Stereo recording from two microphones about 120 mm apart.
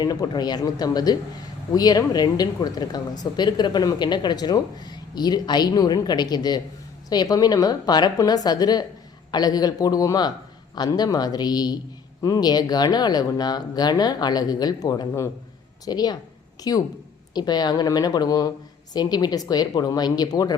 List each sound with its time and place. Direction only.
0.0 s speech: 35° left (ahead or behind)